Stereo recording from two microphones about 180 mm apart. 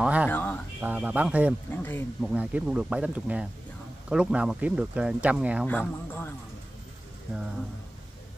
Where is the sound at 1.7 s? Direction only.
10° left (ahead or behind).